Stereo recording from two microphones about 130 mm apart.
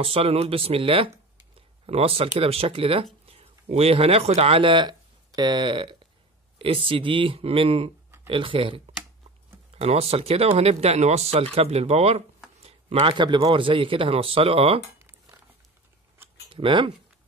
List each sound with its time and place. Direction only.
0.0 s speech: 45° right (ahead or behind)
12.5 s a sound: 50° right (ahead or behind)
13.2 s speech: 35° right (ahead or behind)
15.0 s crumpling: 15° right (ahead or behind)
16.4 s speech: 40° right (ahead or behind)